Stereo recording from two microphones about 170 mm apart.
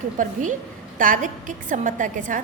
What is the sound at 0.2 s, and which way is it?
A woman's voice, 50° right (ahead or behind).